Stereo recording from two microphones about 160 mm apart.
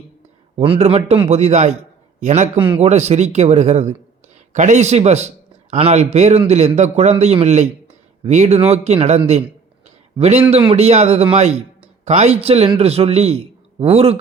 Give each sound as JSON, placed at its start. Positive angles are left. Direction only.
{"t": 0.5, "sound": "a man's voice", "side_deg": -40}